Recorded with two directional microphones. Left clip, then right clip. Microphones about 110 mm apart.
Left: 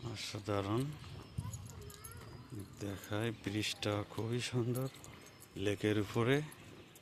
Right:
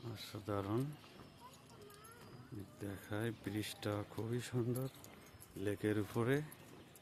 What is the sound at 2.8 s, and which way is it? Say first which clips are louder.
Speech: left 4 dB; 15° right (ahead or behind).